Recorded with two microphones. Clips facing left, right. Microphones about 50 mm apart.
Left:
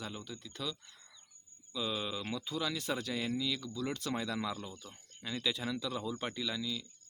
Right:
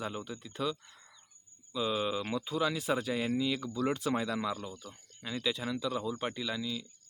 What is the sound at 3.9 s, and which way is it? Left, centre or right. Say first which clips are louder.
Speech: right 3 dB; centre.